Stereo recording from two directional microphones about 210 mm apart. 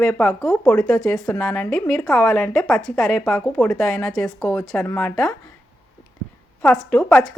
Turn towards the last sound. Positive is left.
turn(degrees=5)  # may be behind; listen again after turning